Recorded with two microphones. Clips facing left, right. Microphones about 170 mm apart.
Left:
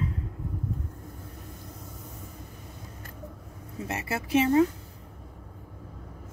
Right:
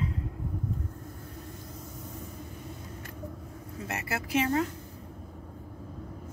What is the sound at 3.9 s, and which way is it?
Speech, 25° left (ahead or behind).